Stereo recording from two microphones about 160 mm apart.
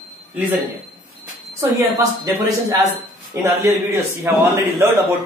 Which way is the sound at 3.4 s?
15° right (ahead or behind).